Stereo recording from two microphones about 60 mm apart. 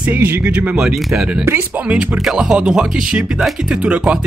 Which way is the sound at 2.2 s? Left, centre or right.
Centre.